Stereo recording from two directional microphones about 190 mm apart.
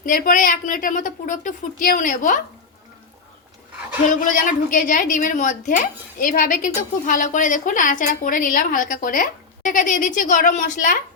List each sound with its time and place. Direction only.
0.0 s a woman's voice: 45° left (ahead or behind)
4.1 s a woman's voice: 45° left (ahead or behind)